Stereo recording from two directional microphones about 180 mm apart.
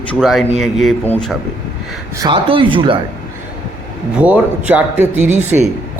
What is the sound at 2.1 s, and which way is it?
Speech, 25° right (ahead or behind).